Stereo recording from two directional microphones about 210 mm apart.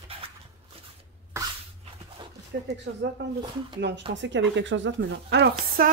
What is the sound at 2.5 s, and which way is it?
A woman's voice, 50° right (ahead or behind).